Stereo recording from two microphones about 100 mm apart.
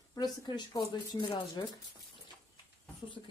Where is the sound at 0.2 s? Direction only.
45° left (ahead or behind).